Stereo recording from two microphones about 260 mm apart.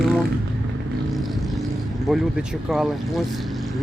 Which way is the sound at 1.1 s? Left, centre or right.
Centre.